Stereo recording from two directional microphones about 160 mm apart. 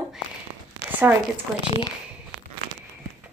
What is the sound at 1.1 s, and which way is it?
Speech, 15° right (ahead or behind).